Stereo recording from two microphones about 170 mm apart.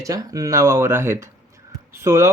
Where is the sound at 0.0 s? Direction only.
20° right (ahead or behind).